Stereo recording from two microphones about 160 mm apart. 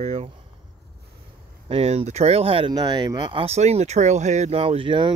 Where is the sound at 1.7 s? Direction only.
40° right (ahead or behind).